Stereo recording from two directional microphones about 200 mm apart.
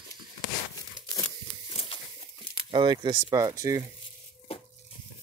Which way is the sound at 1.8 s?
25° left (ahead or behind).